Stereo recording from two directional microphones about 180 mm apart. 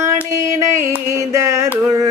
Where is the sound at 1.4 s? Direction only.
15° right (ahead or behind).